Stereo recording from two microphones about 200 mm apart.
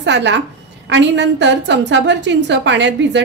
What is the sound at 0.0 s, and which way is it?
A woman's voice, 60° right (ahead or behind).